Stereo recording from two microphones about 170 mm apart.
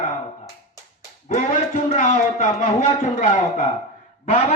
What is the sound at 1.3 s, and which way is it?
A man's voice, 45° left (ahead or behind).